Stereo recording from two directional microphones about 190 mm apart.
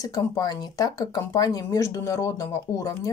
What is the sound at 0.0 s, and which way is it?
Speech, 20° left (ahead or behind).